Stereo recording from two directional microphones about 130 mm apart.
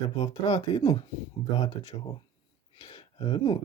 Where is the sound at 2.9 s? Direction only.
40° left (ahead or behind).